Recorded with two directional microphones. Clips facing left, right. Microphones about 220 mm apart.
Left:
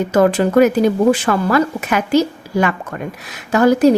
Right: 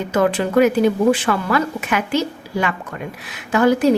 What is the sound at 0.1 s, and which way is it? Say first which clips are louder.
A woman's voice: left 3 dB; 40° left (ahead or behind).